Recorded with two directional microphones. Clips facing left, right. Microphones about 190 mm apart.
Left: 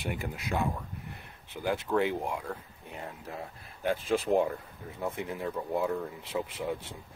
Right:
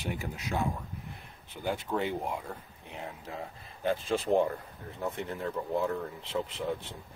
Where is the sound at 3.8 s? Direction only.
10° left (ahead or behind).